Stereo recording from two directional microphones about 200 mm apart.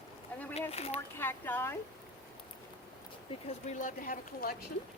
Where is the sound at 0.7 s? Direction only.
30° left (ahead or behind).